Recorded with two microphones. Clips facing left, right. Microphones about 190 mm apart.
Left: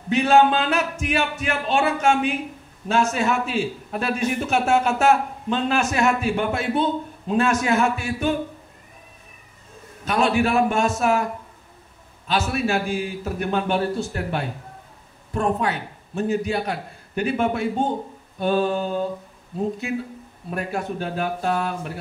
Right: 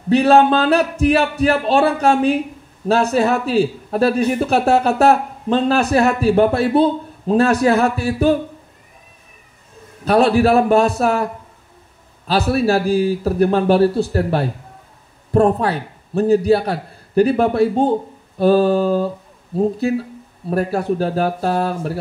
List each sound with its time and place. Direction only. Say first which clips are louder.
0.1 s a man's voice: right 5 dB; 35° right (ahead or behind)
10.0 s a man's voice: right 7 dB; 35° right (ahead or behind)
12.3 s a man's voice: right 7 dB; 35° right (ahead or behind)